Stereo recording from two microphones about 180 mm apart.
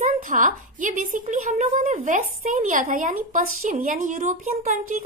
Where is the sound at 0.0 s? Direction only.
45° right (ahead or behind).